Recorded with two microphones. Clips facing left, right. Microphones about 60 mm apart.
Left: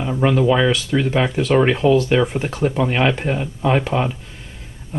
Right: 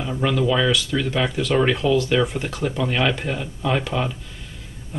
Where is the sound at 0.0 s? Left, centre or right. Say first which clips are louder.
Left 4 dB; left.